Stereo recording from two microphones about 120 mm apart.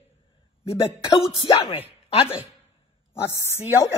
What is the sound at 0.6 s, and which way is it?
Speech, 50° left (ahead or behind).